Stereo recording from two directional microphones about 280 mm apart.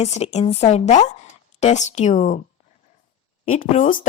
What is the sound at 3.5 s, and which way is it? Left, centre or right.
Speech, left.